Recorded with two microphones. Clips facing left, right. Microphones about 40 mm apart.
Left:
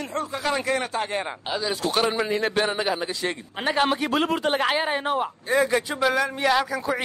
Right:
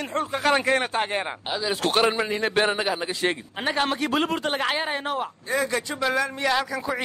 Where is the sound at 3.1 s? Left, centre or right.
Right.